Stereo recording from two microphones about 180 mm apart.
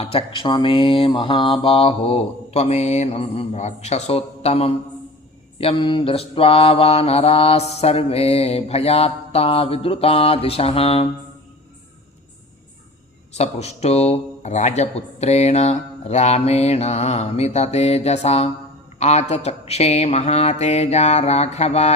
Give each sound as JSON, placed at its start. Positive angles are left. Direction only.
{"t": 0.0, "sound": "mantra", "side_deg": 30}
{"t": 13.3, "sound": "mantra", "side_deg": 35}